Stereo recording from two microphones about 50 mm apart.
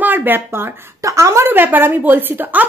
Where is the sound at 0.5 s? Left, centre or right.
Right.